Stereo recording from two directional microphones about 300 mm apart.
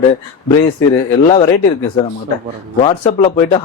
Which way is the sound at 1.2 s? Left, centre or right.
Centre.